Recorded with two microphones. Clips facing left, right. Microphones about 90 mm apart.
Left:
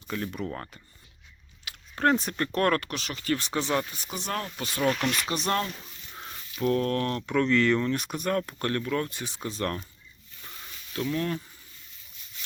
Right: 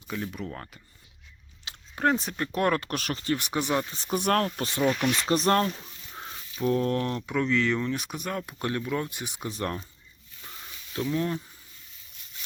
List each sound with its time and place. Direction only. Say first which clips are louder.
0.1 s speech: left 2 dB; centre (ahead or behind)
2.0 s speech: left 1 dB; centre (ahead or behind)
2.9 s speech: right 4 dB; 45° right (ahead or behind)
3.3 s speech: even; 15° right (ahead or behind)
4.1 s speech: right 9 dB; 60° right (ahead or behind)
4.9 s speech: even; 5° right (ahead or behind)
5.5 s speech: right 4 dB; 40° right (ahead or behind)
6.7 s speech: even; 20° right (ahead or behind)
10.9 s speech: right 1 dB; 20° right (ahead or behind)